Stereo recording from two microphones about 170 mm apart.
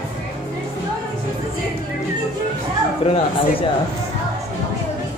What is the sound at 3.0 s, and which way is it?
Speech, 35° left (ahead or behind).